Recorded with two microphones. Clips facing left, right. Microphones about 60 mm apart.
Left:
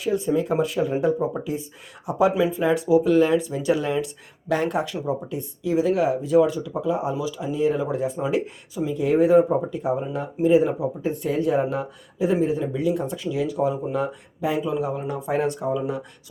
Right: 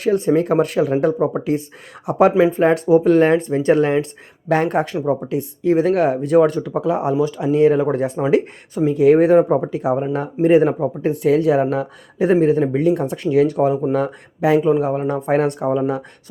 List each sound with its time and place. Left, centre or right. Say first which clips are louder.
0.0 s speech: right 6 dB; right
5.0 s speech: right 7 dB; right
14.7 s speech: right 8 dB; right